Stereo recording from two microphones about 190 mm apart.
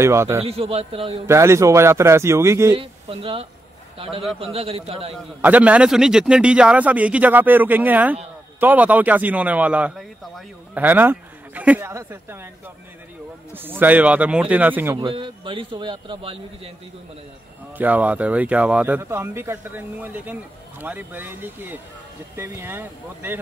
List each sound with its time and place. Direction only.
0.0 s a man's voice: 15° right (ahead or behind)
0.4 s a man's voice: 30° right (ahead or behind)
1.2 s a man's voice: 15° right (ahead or behind)
2.8 s a man's voice: 30° right (ahead or behind)
5.4 s a man's voice: 10° right (ahead or behind)
13.5 s a man's voice: 10° right (ahead or behind)
15.0 s a man's voice: 25° right (ahead or behind)
17.7 s a man's voice: 10° right (ahead or behind)